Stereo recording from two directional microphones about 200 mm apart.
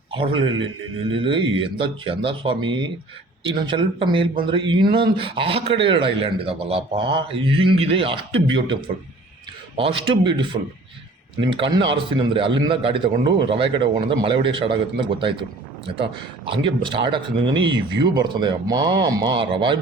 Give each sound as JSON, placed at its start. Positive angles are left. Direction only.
{"t": 0.1, "sound": "speech", "side_deg": -25}
{"t": 16.5, "sound": "speech", "side_deg": -25}